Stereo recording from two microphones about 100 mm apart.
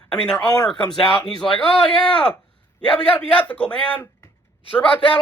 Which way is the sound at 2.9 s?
15° left (ahead or behind).